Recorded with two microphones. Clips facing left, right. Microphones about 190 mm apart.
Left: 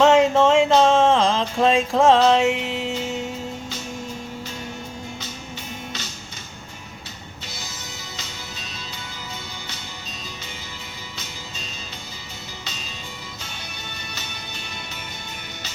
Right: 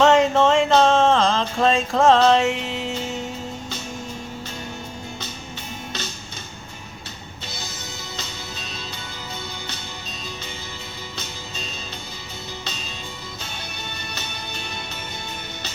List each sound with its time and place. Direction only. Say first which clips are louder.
0.0 s a sound: left 1 dB; 5° left (ahead or behind)
7.4 s music: right 3 dB; 60° right (ahead or behind)
12.6 s music: right 3 dB; 60° right (ahead or behind)